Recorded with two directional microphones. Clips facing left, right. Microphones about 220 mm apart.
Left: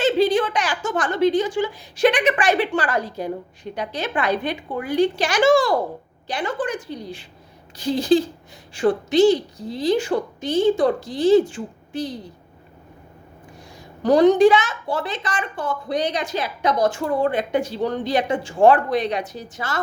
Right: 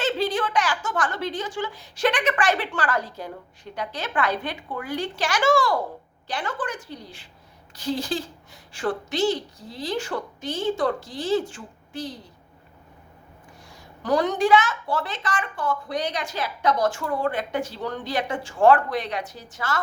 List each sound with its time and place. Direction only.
0.1 s a woman's voice: 15° left (ahead or behind)
14.0 s a woman's voice: 20° left (ahead or behind)